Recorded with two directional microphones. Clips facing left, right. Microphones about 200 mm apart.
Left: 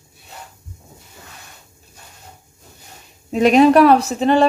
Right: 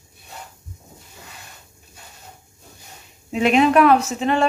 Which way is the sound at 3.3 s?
40° left (ahead or behind).